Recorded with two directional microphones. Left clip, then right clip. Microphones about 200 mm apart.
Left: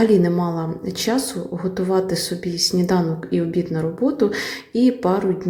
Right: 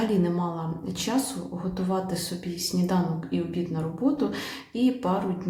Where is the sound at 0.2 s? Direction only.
25° left (ahead or behind).